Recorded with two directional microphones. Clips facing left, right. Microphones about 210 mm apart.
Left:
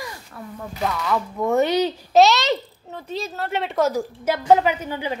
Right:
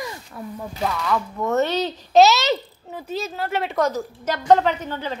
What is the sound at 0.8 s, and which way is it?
A woman's voice, 5° left (ahead or behind).